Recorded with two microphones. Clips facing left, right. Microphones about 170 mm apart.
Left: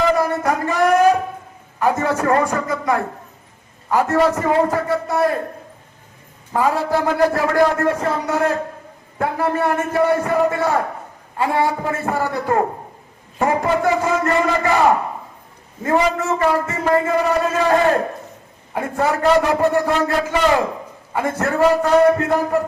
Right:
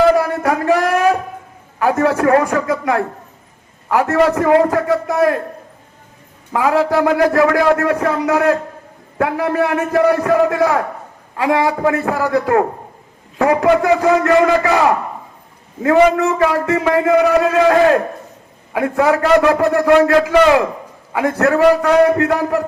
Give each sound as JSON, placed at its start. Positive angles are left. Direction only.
{"t": 0.1, "sound": "a sound", "side_deg": -70}
{"t": 1.8, "sound": "a man's voice", "side_deg": -65}
{"t": 6.5, "sound": "a man's voice", "side_deg": -75}